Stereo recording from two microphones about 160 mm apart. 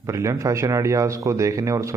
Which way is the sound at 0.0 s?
20° right (ahead or behind).